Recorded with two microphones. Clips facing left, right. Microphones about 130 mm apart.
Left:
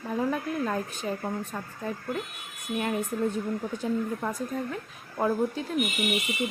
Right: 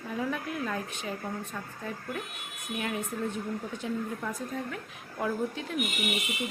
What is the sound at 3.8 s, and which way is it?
A woman's voice, 40° left (ahead or behind).